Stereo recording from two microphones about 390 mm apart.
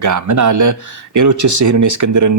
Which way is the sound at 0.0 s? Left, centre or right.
Right.